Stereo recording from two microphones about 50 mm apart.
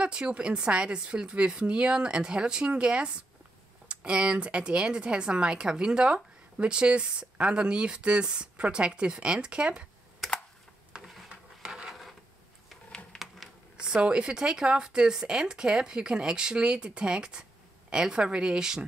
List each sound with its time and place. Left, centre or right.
0.0 s speech: right
11.6 s patter: centre
13.1 s a sound: centre
13.7 s speech: centre